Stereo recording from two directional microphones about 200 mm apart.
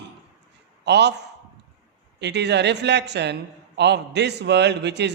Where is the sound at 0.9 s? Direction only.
60° right (ahead or behind).